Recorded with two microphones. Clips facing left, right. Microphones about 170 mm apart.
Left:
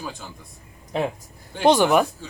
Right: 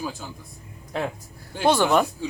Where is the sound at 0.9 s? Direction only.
20° left (ahead or behind).